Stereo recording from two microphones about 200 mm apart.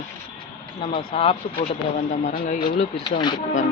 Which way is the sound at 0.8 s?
25° left (ahead or behind).